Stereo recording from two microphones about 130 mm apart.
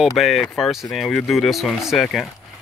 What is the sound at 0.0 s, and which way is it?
Speech, centre (ahead or behind).